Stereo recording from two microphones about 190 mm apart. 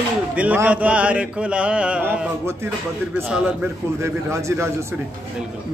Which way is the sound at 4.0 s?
15° right (ahead or behind).